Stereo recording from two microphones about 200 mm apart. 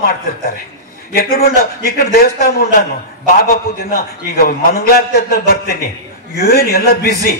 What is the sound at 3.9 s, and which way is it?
Speech, 50° left (ahead or behind).